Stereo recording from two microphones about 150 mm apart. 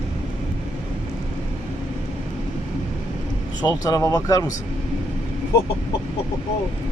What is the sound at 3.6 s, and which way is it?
Speech, 25° left (ahead or behind).